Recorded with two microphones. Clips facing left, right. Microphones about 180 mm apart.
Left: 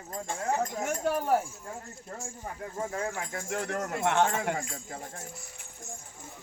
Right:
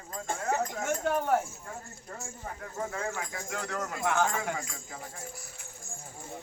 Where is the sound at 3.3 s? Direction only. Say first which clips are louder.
Left 3 dB; 55° left (ahead or behind).